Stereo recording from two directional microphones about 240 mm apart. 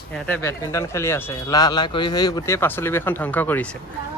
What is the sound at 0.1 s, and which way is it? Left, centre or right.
Speech, centre.